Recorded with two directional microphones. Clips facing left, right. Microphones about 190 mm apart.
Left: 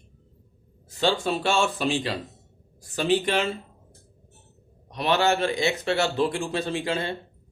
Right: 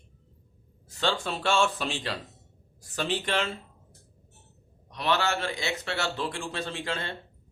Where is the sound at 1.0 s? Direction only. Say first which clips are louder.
Left 5 dB; 5° left (ahead or behind).